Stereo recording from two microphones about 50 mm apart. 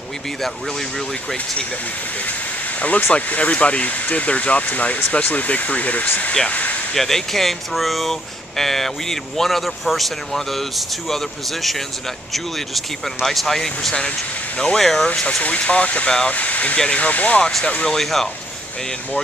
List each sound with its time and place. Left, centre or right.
0.4 s speech: centre
2.8 s speech: left
6.9 s speech: centre
15.2 s speech: left
17.8 s speech: centre